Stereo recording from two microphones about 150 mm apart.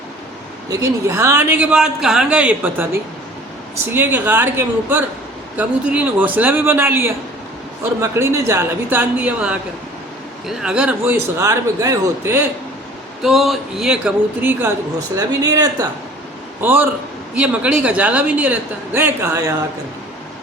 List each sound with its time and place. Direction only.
0.7 s a man's voice: 20° right (ahead or behind)
13.2 s speech: centre (ahead or behind)
15.1 s speech: 25° right (ahead or behind)
16.6 s a man's voice: 15° right (ahead or behind)